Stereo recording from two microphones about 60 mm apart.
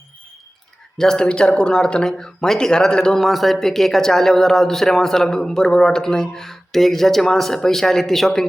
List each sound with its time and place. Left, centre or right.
0.9 s speech: centre